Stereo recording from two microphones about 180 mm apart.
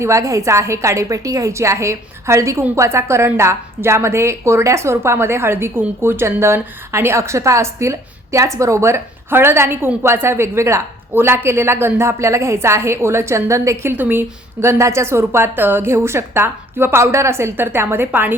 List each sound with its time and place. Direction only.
0.0 s a woman's voice: 15° right (ahead or behind)